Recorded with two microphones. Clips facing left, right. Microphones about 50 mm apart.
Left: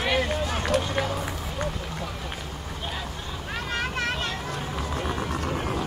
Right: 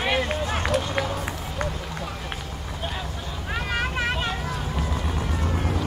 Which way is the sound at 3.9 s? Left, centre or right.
Centre.